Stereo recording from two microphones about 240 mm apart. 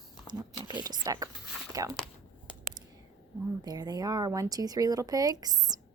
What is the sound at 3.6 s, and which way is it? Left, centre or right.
A woman's voice, centre.